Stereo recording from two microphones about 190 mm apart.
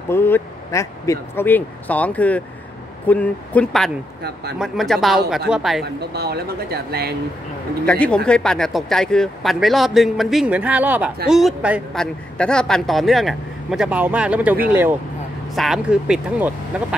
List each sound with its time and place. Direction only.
0.1 s a man's voice: 10° left (ahead or behind)
6.1 s speech: 55° right (ahead or behind)
7.8 s a man's voice: 5° left (ahead or behind)